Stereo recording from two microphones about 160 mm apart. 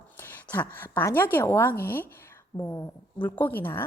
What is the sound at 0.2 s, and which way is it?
A woman's voice, 15° left (ahead or behind).